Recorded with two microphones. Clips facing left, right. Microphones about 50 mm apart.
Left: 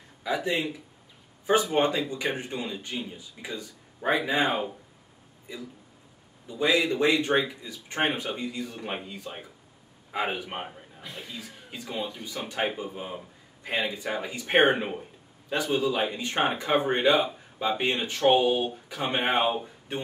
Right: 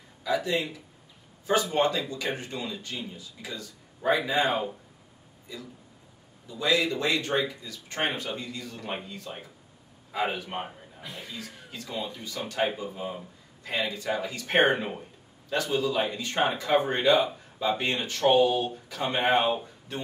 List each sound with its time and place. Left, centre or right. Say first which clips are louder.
0.2 s speech: even; left
5.5 s speech: left 2 dB; left
11.0 s speech: even; centre
11.3 s speech: even; centre